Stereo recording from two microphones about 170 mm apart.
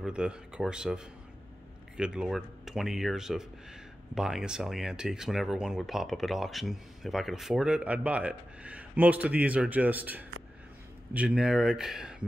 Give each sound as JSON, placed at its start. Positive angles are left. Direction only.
{"t": 0.0, "sound": "speech", "side_deg": -5}